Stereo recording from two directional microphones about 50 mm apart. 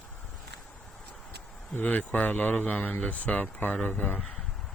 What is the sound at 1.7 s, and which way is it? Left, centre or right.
A man's voice, left.